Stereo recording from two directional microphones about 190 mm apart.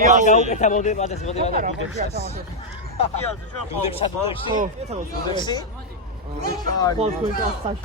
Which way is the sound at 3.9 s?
30° left (ahead or behind).